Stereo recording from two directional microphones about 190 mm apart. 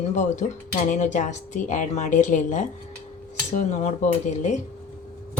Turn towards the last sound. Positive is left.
turn(degrees=35)  # may be behind; listen again after turning